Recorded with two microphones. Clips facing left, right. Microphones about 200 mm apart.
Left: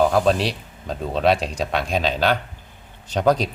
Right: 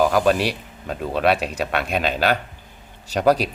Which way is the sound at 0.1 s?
70° right (ahead or behind).